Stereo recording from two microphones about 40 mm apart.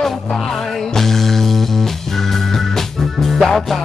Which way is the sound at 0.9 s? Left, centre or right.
Centre.